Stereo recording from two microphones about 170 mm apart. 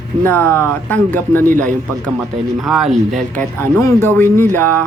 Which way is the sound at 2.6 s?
Centre (ahead or behind).